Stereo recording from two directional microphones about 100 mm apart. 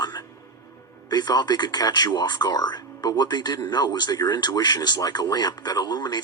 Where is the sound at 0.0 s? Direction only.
45° left (ahead or behind).